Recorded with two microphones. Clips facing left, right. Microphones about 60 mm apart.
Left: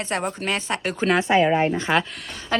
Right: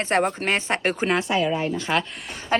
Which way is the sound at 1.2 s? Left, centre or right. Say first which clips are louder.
Left 5 dB; left.